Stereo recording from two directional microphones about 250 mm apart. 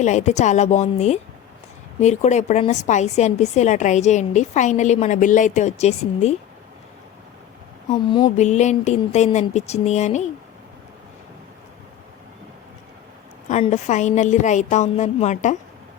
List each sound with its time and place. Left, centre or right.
0.0 s a woman's voice: left
7.9 s a woman's voice: left
13.5 s a woman's voice: left